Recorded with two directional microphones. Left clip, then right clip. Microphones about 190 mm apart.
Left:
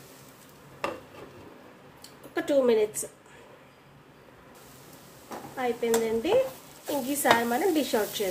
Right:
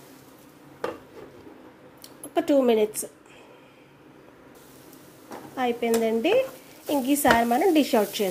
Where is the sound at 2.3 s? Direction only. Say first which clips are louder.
Right 3 dB; 35° right (ahead or behind).